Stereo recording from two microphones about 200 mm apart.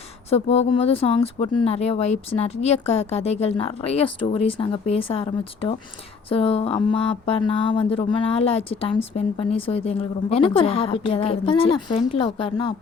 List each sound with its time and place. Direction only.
0.3 s speech: 30° left (ahead or behind)